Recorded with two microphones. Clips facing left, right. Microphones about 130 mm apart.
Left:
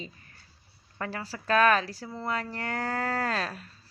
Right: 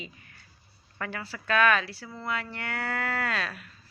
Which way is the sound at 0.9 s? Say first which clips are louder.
Left 1 dB; 35° left (ahead or behind).